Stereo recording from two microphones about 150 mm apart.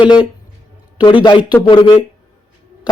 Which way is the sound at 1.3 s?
30° left (ahead or behind).